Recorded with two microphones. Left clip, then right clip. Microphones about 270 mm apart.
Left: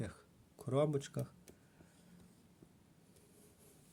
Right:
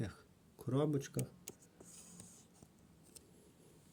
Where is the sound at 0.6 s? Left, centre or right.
Centre.